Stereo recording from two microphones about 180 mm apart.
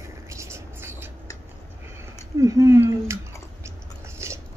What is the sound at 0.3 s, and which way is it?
Whispering, 15° right (ahead or behind).